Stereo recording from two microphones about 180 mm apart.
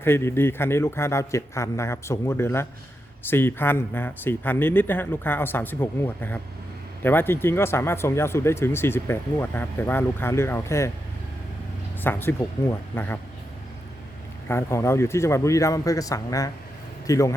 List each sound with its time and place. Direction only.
0.0 s speech: 15° left (ahead or behind)
12.0 s speech: 15° left (ahead or behind)
14.4 s speech: 15° left (ahead or behind)